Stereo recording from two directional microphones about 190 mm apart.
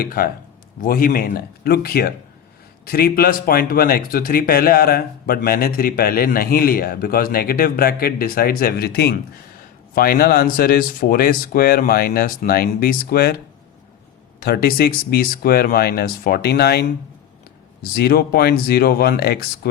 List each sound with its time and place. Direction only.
0.0 s speech: 50° left (ahead or behind)
14.3 s speech: 55° left (ahead or behind)
17.9 s speech: 55° left (ahead or behind)